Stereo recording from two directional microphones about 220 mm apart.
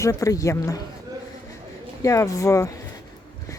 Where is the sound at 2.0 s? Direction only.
15° left (ahead or behind).